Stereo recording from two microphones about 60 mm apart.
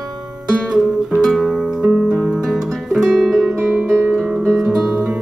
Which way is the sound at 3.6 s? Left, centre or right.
Right.